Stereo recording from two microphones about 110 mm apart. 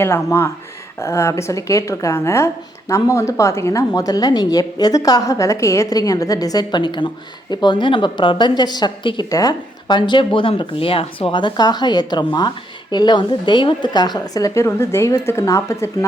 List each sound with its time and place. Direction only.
0.0 s a woman's voice: 25° left (ahead or behind)